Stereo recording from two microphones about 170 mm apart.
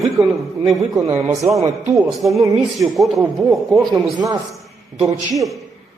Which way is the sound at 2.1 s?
Centre (ahead or behind).